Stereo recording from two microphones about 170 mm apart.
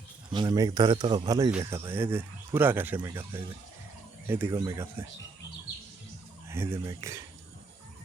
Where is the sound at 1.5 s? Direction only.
5° right (ahead or behind).